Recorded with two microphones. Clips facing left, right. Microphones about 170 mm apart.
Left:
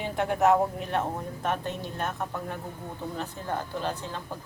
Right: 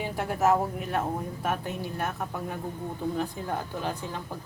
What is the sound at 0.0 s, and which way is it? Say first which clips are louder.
Speech: left 2 dB; 5° right (ahead or behind).